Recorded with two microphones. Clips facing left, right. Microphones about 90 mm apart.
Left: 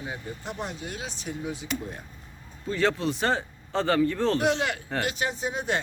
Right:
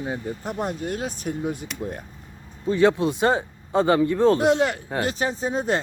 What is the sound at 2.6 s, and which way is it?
Speech, 20° right (ahead or behind).